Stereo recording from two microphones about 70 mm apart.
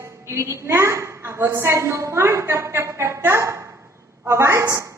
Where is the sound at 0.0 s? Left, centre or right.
Right.